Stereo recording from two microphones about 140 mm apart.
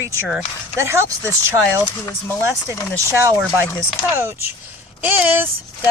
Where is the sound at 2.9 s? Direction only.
20° right (ahead or behind).